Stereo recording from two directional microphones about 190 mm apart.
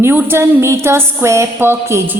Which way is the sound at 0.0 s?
10° right (ahead or behind).